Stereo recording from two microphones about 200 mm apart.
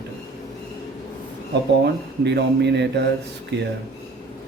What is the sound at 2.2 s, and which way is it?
A man's voice, 60° right (ahead or behind).